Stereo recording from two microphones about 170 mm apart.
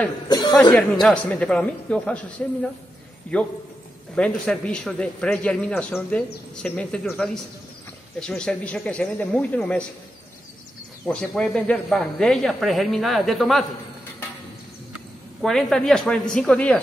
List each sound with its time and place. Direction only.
0.3 s chuckle: 25° left (ahead or behind)
0.6 s speech: 5° left (ahead or behind)
11.1 s speech: 5° left (ahead or behind)
15.4 s speech: 5° left (ahead or behind)